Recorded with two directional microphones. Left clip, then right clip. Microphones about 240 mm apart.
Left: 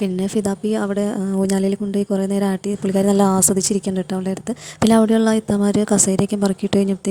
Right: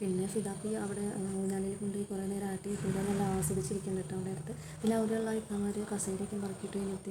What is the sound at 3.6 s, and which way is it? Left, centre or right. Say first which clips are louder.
A woman's voice: left 15 dB; left.